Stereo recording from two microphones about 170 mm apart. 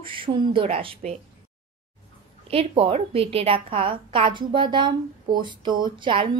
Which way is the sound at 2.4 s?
35° right (ahead or behind).